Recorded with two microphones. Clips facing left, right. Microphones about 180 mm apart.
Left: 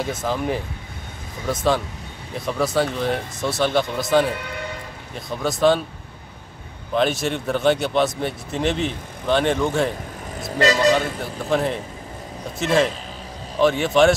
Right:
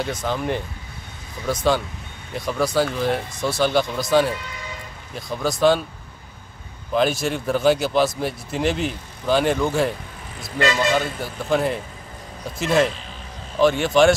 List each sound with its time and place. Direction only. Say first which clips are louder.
0.0 s speech: left 1 dB; 5° left (ahead or behind)
6.9 s speech: even; centre (ahead or behind)
10.6 s speech: left 3 dB; 40° left (ahead or behind)
10.9 s speech: left 3 dB; centre (ahead or behind)